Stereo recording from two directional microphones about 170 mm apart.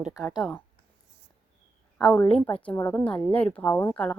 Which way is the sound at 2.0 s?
5° left (ahead or behind).